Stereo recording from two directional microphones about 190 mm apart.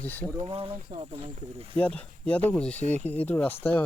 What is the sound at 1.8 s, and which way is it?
Speech, 5° left (ahead or behind).